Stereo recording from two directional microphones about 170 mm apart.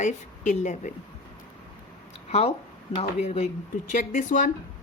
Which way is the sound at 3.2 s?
40° left (ahead or behind).